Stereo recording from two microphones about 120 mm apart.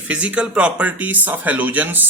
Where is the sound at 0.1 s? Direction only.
10° right (ahead or behind).